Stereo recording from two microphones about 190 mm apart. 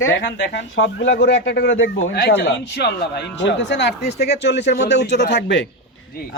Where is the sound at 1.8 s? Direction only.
90° left.